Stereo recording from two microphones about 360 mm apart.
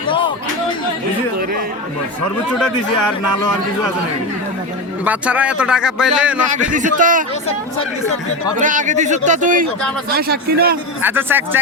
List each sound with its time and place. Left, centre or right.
5.0 s speech: centre
6.7 s a man's voice: right
8.5 s a man's voice: right
11.0 s speech: centre